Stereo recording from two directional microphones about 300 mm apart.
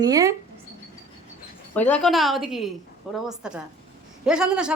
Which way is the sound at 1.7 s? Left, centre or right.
Centre.